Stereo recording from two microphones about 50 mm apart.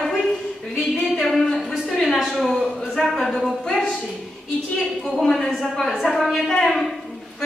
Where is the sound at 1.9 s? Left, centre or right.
Centre.